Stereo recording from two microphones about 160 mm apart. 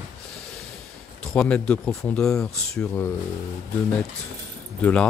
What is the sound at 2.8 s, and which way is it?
Speech, 15° left (ahead or behind).